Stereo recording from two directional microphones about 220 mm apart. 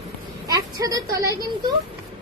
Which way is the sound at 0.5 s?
15° right (ahead or behind).